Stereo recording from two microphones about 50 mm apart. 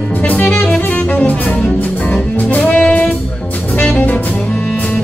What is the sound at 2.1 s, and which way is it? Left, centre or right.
Music, left.